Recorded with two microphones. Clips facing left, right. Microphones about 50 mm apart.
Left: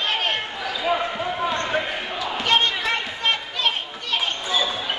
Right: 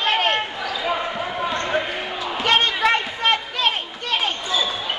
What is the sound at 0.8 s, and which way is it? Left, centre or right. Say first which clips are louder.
Basketball bounce: left 2 dB; centre.